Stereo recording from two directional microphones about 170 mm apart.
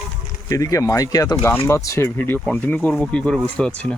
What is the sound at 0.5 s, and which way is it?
Speech, 20° left (ahead or behind).